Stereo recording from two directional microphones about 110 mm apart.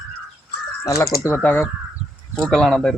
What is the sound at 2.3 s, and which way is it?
Speech, 5° left (ahead or behind).